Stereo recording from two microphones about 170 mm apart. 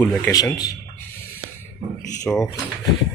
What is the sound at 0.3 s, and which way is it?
Speech, 20° left (ahead or behind).